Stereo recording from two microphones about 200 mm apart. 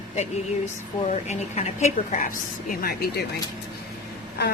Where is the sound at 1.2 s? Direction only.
35° left (ahead or behind).